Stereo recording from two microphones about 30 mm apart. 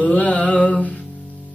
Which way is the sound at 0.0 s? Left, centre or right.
Left.